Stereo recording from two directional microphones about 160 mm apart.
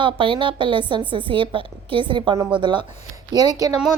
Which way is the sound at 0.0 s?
30° right (ahead or behind).